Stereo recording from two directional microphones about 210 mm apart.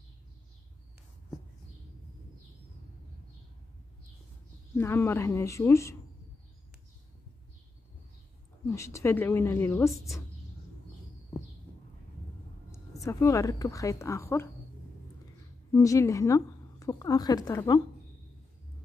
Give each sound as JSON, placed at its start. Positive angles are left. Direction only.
{"t": 4.7, "sound": "a woman's voice", "side_deg": 10}
{"t": 8.6, "sound": "a woman's voice", "side_deg": 15}
{"t": 12.7, "sound": "a woman's voice", "side_deg": 15}
{"t": 15.7, "sound": "a woman's voice", "side_deg": 15}